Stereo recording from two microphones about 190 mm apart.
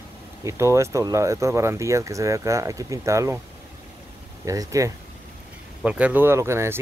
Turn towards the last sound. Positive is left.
turn(degrees=-15)  # may be behind; listen again after turning